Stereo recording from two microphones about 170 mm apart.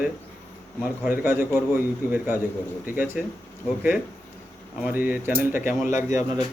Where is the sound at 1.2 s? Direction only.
10° right (ahead or behind).